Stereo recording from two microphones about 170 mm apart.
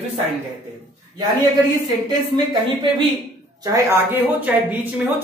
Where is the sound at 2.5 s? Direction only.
25° right (ahead or behind).